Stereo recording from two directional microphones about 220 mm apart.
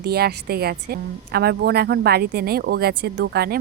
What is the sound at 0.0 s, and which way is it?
Speech, 45° right (ahead or behind).